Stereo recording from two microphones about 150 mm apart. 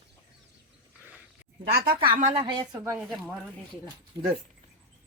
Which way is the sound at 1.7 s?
90° right.